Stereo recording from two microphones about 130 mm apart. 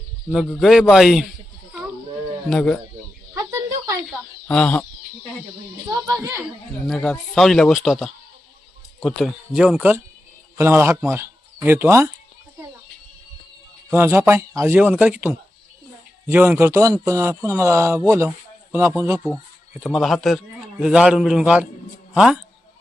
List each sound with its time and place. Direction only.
0.5 s speech: centre (ahead or behind)
2.5 s speech: 5° left (ahead or behind)
3.3 s a sound: 25° right (ahead or behind)
4.4 s speech: 10° left (ahead or behind)
6.8 s a man's voice: 5° left (ahead or behind); by 12.1 s 20° right (ahead or behind)
13.9 s a man's voice: 20° right (ahead or behind)
19.7 s a man's voice: 5° right (ahead or behind)